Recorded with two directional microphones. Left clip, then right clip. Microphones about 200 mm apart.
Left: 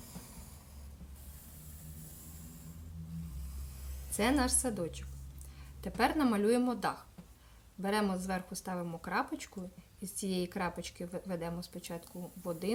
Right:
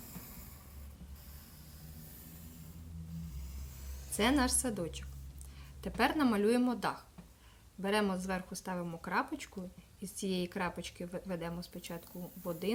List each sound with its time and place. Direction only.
4.2 s speech: 5° right (ahead or behind)